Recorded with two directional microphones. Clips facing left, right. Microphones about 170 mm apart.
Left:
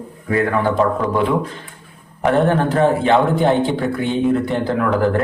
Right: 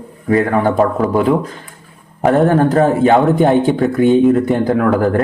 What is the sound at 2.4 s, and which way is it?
Speech, 45° right (ahead or behind).